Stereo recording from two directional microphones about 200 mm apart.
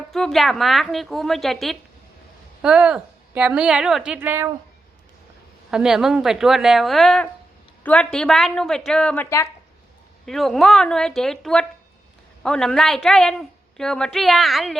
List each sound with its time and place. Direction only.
0.1 s a woman's voice: centre (ahead or behind)
5.7 s a woman's voice: 5° right (ahead or behind)